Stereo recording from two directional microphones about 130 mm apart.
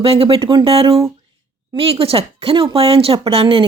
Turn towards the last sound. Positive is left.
turn(degrees=-45)  # may be behind; listen again after turning